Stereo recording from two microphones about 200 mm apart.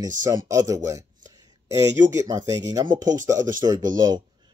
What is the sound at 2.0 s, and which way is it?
Speech, 15° right (ahead or behind).